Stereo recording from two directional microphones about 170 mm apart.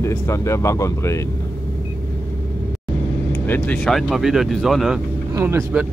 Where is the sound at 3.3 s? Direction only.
10° left (ahead or behind).